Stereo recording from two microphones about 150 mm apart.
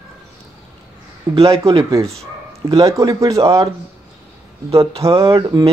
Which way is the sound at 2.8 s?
20° right (ahead or behind).